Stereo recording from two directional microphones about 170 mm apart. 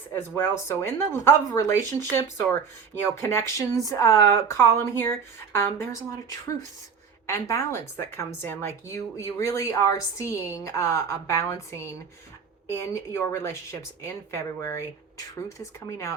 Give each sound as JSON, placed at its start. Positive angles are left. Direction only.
{"t": 0.1, "sound": "speech", "side_deg": 15}
{"t": 7.3, "sound": "speech", "side_deg": 15}
{"t": 15.9, "sound": "speech", "side_deg": 15}